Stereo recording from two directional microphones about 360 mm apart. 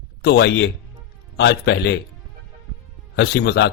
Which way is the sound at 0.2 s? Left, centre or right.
Left.